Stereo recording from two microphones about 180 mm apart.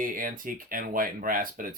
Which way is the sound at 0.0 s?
50° right (ahead or behind).